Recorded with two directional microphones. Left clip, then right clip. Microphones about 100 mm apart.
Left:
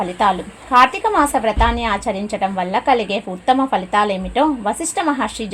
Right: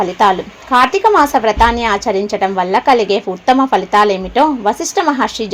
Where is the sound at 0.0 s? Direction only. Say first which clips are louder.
Right 5 dB; 35° right (ahead or behind).